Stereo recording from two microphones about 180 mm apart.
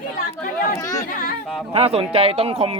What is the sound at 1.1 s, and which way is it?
Speech, 50° left (ahead or behind).